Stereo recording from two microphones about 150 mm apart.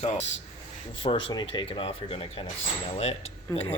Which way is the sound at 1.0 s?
35° left (ahead or behind).